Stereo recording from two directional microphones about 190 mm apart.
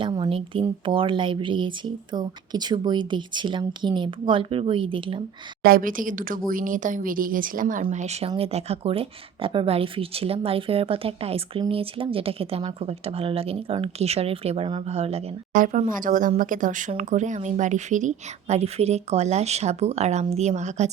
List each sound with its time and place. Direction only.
0.0 s speech: 25° right (ahead or behind)
5.6 s a woman's voice: 50° right (ahead or behind); by 15.2 s 30° right (ahead or behind)
15.5 s a woman's voice: 45° right (ahead or behind)